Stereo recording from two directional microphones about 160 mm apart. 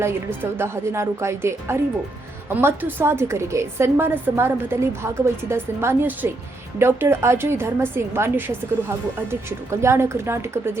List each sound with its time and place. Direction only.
0.0 s a woman's voice: 15° right (ahead or behind)